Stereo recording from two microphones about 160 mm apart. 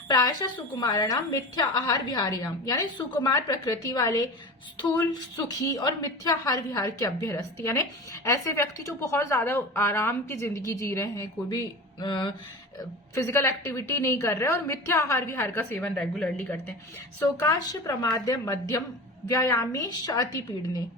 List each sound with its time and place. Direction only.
0.1 s a woman's voice: 25° left (ahead or behind)
5.5 s a woman's voice: 20° left (ahead or behind)
13.1 s a woman's voice: 15° left (ahead or behind)
17.2 s a woman's voice: 20° left (ahead or behind)